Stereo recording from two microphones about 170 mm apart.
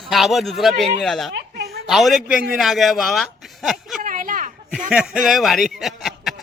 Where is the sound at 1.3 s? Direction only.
75° right (ahead or behind).